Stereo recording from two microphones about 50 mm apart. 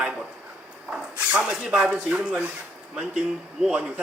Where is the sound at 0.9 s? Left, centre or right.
Centre.